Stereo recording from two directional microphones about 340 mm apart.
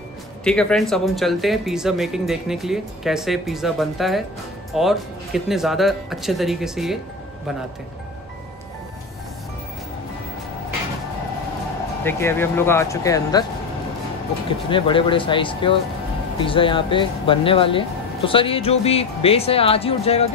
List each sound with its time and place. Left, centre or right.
0.4 s speech: centre
12.0 s speech: centre
14.7 s speech: centre